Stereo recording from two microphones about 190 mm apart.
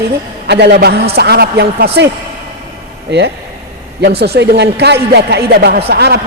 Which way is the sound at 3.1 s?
60° right (ahead or behind).